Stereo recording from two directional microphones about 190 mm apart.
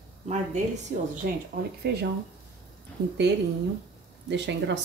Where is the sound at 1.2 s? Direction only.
55° right (ahead or behind).